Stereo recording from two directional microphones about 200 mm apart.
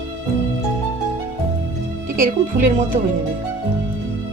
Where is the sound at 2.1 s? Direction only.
40° right (ahead or behind).